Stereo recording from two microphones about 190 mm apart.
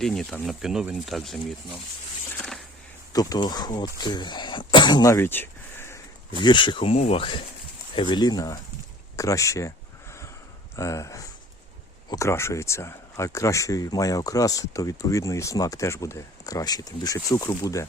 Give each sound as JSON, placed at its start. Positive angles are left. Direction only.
{"t": 0.0, "sound": "speech", "side_deg": 5}
{"t": 2.4, "sound": "a sound", "side_deg": 0}
{"t": 3.1, "sound": "speech", "side_deg": 20}
{"t": 6.4, "sound": "speech", "side_deg": 25}
{"t": 10.8, "sound": "speech", "side_deg": 15}